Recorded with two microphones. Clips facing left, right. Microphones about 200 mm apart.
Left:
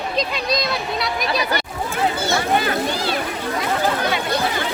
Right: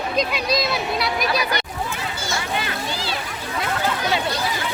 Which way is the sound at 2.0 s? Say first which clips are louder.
Left 8 dB; 60° left (ahead or behind).